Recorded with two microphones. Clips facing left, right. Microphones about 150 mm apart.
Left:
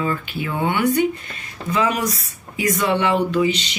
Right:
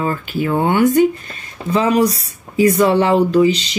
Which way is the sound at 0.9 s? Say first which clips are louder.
Right 6 dB; 35° right (ahead or behind).